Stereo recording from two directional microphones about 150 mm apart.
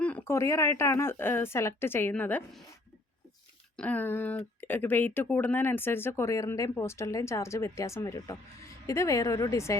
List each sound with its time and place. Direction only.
0.0 s speech: 10° left (ahead or behind)
3.8 s a woman's voice: 10° left (ahead or behind)